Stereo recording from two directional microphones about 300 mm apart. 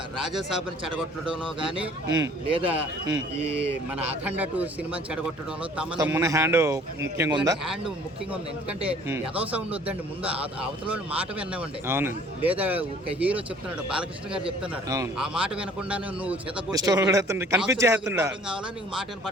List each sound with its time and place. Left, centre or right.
1.2 s a man's voice: centre
3.4 s speech: right
4.2 s a man's voice: centre
7.6 s a man's voice: centre
14.4 s a man's voice: centre